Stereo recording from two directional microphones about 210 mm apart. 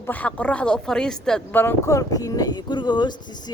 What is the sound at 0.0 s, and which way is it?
Speech, 10° left (ahead or behind).